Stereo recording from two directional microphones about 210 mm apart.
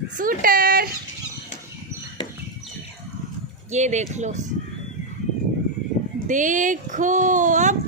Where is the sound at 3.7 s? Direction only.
35° right (ahead or behind).